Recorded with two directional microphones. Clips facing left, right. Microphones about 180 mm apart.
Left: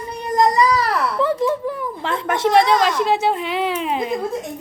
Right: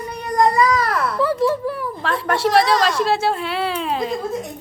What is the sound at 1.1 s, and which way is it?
Speech, 20° left (ahead or behind).